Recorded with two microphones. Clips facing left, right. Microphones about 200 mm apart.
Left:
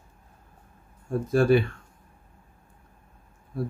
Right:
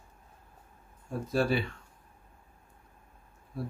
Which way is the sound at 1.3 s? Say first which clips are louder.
Left 8 dB; 50° left (ahead or behind).